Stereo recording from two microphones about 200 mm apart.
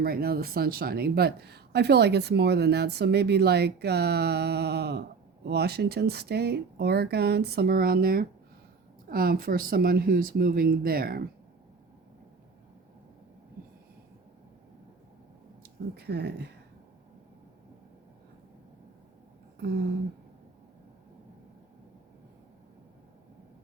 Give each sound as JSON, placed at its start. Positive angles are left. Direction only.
{"t": 0.0, "sound": "speech", "side_deg": -50}
{"t": 16.0, "sound": "speech", "side_deg": -55}
{"t": 19.5, "sound": "a sound", "side_deg": -50}